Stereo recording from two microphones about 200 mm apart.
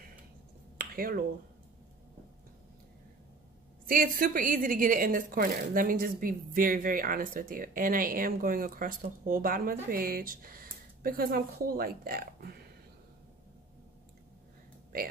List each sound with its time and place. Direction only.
0.7 s finger snapping: 45° right (ahead or behind)
3.9 s a woman's voice: 45° right (ahead or behind)